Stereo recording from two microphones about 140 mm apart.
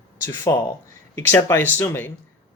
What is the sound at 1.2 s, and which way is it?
Speech, 20° left (ahead or behind).